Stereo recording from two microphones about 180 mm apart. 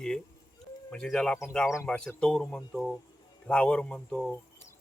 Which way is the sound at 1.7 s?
15° left (ahead or behind).